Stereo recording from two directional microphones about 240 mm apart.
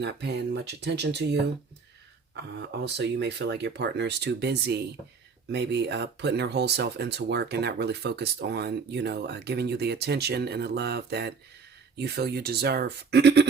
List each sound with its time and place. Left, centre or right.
0.0 s speech: right